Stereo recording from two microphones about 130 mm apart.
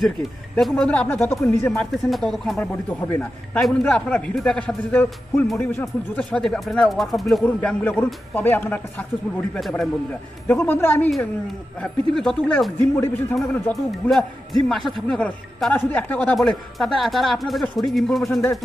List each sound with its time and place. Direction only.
0.6 s a man's voice: 5° left (ahead or behind)
2.7 s a man's voice: 15° left (ahead or behind)
7.4 s a man's voice: 15° left (ahead or behind)
9.5 s a man's voice: centre (ahead or behind)
10.5 s a man's voice: 15° left (ahead or behind)
11.8 s a man's voice: 5° left (ahead or behind)
16.3 s a man's voice: centre (ahead or behind)